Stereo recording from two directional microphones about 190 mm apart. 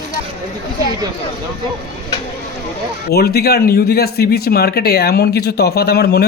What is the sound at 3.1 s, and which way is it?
Speech, 55° left (ahead or behind).